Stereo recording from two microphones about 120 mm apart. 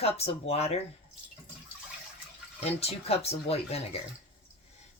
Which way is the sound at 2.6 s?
55° left (ahead or behind).